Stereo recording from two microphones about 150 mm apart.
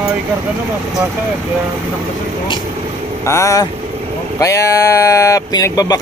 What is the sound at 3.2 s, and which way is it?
Speech, 20° left (ahead or behind).